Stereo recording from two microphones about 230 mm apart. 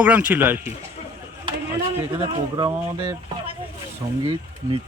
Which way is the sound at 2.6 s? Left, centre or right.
Centre.